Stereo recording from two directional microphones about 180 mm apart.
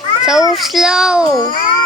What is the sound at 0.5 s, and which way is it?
Speech, centre (ahead or behind).